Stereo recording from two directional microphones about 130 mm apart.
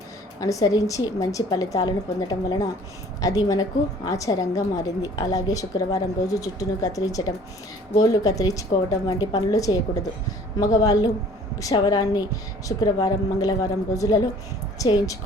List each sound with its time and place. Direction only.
0.3 s a woman's voice: 25° left (ahead or behind)